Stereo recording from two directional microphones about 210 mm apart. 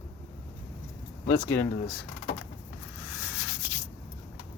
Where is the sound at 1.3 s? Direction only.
10° left (ahead or behind).